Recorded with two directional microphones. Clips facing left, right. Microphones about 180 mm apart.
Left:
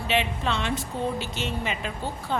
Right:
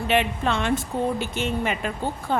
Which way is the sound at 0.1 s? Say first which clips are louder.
Right 3 dB; 50° right (ahead or behind).